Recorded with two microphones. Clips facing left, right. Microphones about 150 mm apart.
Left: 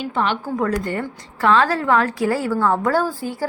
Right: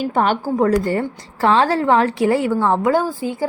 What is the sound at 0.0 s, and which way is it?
Speech, 45° right (ahead or behind).